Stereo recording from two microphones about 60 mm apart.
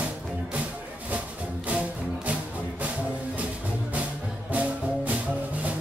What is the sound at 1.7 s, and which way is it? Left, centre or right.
Music, right.